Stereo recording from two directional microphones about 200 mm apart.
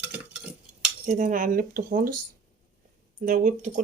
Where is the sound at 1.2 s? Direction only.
40° right (ahead or behind).